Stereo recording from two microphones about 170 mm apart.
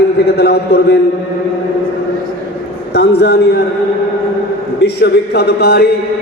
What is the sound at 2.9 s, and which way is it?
Speech, 75° left (ahead or behind).